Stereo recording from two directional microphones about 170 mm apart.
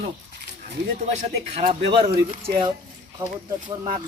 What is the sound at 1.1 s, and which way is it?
Speech, 35° right (ahead or behind).